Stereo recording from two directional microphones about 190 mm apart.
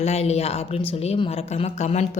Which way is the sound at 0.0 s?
35° left (ahead or behind).